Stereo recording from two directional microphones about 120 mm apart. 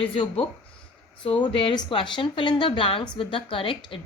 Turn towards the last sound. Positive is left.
turn(degrees=45)  # may be behind; listen again after turning